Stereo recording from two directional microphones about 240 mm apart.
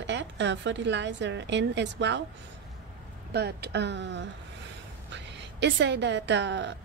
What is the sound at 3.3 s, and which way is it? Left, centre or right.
A woman's voice, right.